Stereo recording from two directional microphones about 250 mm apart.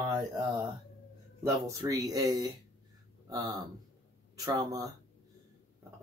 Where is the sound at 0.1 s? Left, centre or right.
Centre.